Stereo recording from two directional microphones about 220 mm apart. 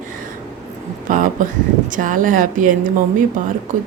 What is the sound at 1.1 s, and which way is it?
A woman's voice, 35° right (ahead or behind).